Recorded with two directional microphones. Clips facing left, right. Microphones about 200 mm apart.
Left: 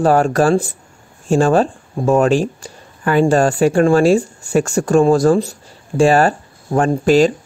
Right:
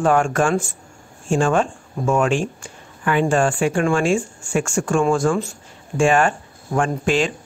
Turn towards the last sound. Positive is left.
turn(degrees=40)  # may be behind; listen again after turning